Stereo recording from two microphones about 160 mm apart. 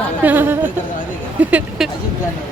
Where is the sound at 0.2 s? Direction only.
10° right (ahead or behind).